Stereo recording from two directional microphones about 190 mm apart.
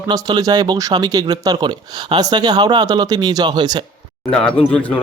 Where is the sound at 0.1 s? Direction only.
20° right (ahead or behind).